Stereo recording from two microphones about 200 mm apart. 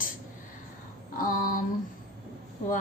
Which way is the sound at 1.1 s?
40° left (ahead or behind).